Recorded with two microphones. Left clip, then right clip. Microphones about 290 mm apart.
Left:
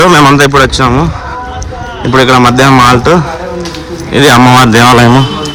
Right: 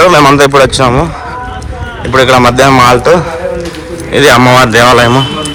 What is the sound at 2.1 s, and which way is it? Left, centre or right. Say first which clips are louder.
A man's voice: even; centre.